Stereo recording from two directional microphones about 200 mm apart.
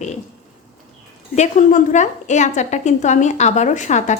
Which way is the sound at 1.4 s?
40° left (ahead or behind).